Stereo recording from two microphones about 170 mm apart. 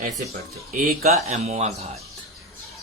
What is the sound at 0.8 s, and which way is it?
Speech, 45° right (ahead or behind).